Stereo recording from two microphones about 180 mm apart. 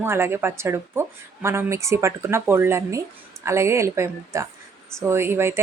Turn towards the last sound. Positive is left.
turn(degrees=-15)  # may be behind; listen again after turning